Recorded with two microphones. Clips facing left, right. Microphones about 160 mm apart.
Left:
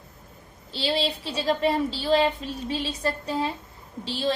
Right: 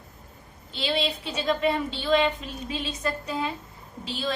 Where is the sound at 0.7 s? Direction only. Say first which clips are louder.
Left 1 dB; 35° left (ahead or behind).